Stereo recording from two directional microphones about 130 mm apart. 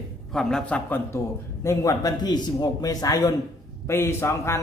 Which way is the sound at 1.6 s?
25° left (ahead or behind).